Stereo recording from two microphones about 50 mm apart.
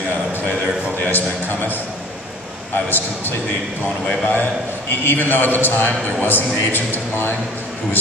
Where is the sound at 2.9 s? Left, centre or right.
Left.